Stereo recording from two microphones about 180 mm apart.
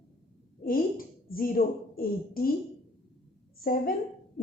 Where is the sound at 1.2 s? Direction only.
55° left (ahead or behind).